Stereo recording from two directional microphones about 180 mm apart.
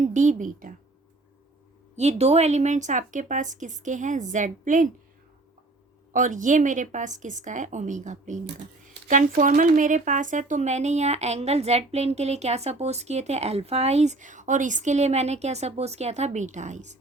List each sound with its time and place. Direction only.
0.0 s a woman's voice: 40° right (ahead or behind)
2.0 s a woman's voice: 35° right (ahead or behind)
6.1 s a woman's voice: 45° right (ahead or behind)